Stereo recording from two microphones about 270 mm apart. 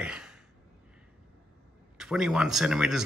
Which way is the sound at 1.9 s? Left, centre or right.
Centre.